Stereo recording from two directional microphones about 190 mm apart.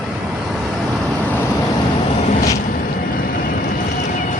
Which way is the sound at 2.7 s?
45° left (ahead or behind).